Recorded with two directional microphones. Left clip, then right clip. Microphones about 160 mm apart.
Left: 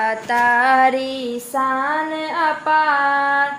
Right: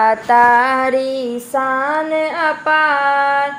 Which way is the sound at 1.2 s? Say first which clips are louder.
Right 3 dB; 20° right (ahead or behind).